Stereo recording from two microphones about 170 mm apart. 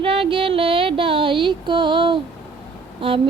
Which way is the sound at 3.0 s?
30° right (ahead or behind).